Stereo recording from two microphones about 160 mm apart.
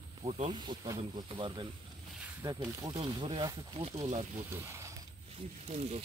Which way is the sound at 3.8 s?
40° right (ahead or behind).